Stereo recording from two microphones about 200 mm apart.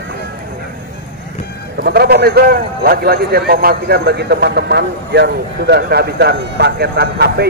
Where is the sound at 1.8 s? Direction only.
50° right (ahead or behind).